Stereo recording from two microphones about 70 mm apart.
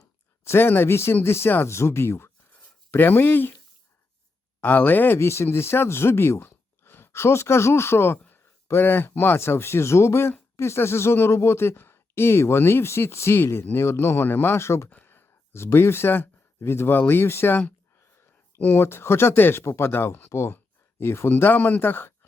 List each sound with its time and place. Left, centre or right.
0.4 s speech: left
4.6 s speech: left
14.8 s speech: left